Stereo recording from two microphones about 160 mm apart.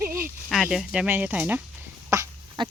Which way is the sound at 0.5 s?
Centre (ahead or behind).